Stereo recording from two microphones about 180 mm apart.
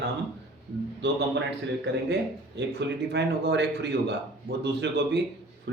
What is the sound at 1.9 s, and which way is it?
Speech, 70° right (ahead or behind).